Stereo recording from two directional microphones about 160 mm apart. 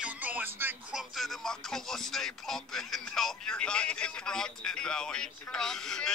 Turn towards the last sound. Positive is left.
turn(degrees=5)  # may be behind; listen again after turning